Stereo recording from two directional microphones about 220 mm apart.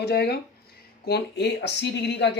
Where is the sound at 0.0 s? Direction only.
45° left (ahead or behind).